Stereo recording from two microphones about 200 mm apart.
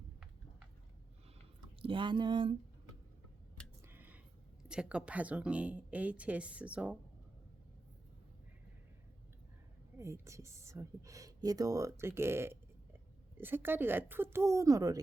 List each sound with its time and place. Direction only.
1.8 s speech: 25° right (ahead or behind)
3.8 s a sound: 10° right (ahead or behind)
4.7 s speech: 5° right (ahead or behind)
10.0 s speech: 15° right (ahead or behind)